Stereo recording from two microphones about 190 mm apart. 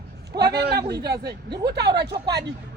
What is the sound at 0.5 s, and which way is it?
A man's voice, 55° right (ahead or behind).